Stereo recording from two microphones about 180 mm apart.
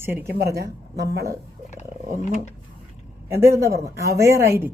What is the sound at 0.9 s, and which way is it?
Speech, 65° right (ahead or behind).